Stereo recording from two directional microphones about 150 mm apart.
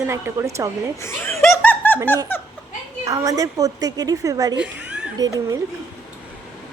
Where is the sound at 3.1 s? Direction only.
25° right (ahead or behind).